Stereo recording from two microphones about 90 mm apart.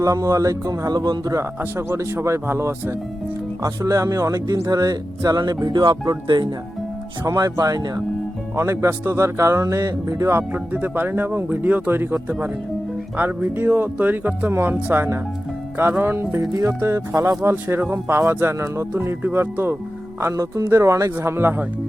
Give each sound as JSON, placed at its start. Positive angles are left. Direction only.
{"t": 0.0, "sound": "speech", "side_deg": -35}
{"t": 1.9, "sound": "speech", "side_deg": -30}
{"t": 6.2, "sound": "speech", "side_deg": -65}
{"t": 7.3, "sound": "speech", "side_deg": -40}
{"t": 10.5, "sound": "speech", "side_deg": -20}
{"t": 17.5, "sound": "speech", "side_deg": -20}
{"t": 20.2, "sound": "speech", "side_deg": -35}